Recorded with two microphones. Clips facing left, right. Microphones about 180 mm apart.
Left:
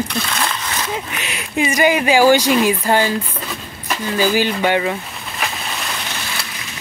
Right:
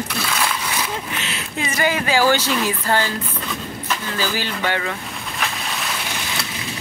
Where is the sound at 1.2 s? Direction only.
15° left (ahead or behind).